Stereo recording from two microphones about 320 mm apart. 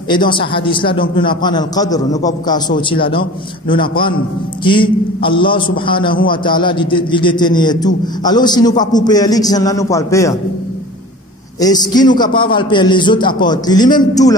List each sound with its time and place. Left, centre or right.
0.3 s a man's voice: centre
11.6 s a man's voice: centre